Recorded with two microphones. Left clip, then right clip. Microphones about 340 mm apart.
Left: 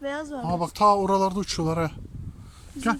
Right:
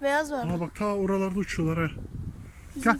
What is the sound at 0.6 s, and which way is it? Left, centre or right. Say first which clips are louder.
Speech: left 13 dB; centre.